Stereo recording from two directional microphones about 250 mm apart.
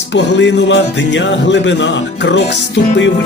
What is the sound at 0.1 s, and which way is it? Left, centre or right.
Music, left.